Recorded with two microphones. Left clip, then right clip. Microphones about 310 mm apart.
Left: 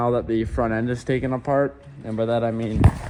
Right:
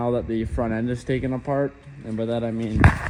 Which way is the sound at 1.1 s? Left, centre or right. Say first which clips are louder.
Left 4 dB; left.